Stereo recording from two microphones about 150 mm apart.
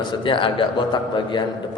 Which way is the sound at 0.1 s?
35° left (ahead or behind).